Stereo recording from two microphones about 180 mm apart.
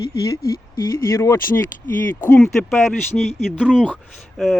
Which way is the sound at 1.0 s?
15° left (ahead or behind).